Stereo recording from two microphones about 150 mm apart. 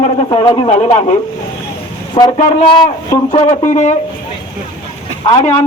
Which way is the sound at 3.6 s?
50° left (ahead or behind).